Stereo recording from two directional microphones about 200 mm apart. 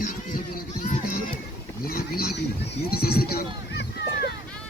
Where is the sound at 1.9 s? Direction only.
50° left (ahead or behind).